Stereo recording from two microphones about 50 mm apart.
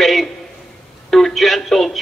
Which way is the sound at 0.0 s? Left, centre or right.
Centre.